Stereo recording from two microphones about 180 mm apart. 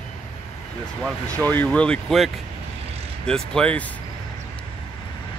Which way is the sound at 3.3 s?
5° left (ahead or behind).